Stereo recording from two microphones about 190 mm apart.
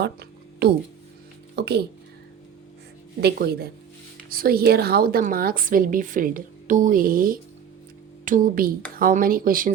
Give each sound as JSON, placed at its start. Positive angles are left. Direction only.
{"t": 0.0, "sound": "a sound", "side_deg": -60}
{"t": 1.5, "sound": "speech", "side_deg": -60}
{"t": 3.2, "sound": "a woman's voice", "side_deg": -60}